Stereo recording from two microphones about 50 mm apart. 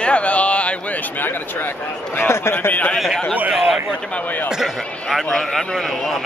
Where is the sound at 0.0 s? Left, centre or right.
Left.